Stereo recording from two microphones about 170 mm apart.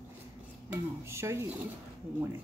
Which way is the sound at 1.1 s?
15° right (ahead or behind).